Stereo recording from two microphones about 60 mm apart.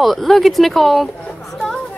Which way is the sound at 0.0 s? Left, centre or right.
Centre.